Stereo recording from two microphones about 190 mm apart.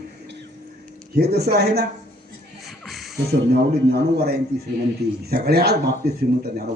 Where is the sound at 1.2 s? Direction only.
55° right (ahead or behind).